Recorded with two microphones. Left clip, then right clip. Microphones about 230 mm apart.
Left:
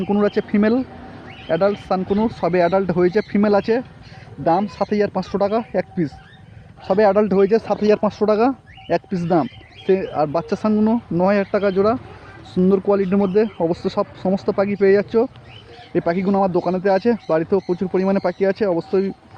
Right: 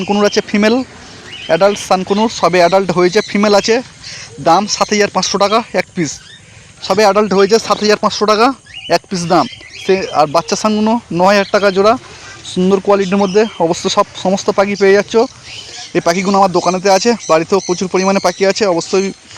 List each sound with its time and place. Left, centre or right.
0.1 s speech: centre